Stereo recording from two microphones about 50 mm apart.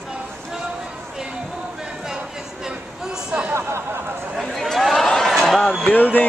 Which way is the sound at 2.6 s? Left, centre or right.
Centre.